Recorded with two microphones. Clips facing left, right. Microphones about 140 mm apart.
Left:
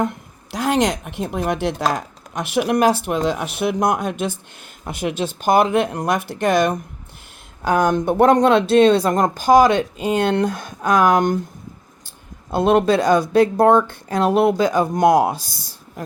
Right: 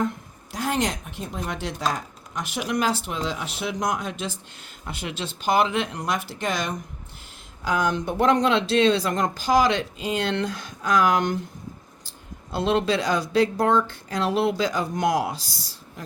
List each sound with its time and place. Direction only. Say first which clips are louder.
0.5 s speech: left 7 dB; 75° left (ahead or behind); by 15.7 s 55° left (ahead or behind)